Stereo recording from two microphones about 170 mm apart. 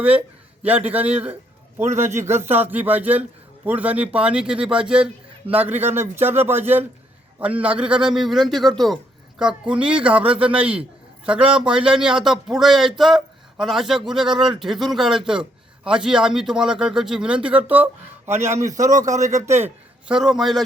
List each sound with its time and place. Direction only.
0.0 s a man's voice: 10° right (ahead or behind)
11.9 s a man's voice: 5° right (ahead or behind)